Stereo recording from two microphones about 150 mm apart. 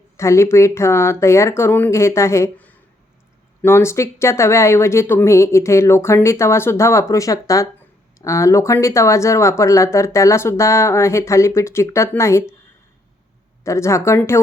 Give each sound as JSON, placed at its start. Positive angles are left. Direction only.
{"t": 0.2, "sound": "speech", "side_deg": 20}
{"t": 13.7, "sound": "speech", "side_deg": 20}